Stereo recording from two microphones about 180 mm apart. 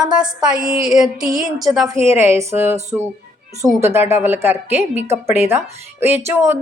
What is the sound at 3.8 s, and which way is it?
A woman's voice, 15° right (ahead or behind).